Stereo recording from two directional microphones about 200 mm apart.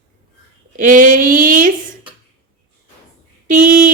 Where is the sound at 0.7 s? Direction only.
40° right (ahead or behind).